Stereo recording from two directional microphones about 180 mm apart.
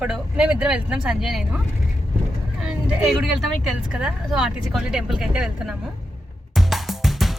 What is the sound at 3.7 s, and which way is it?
Speech, 5° right (ahead or behind).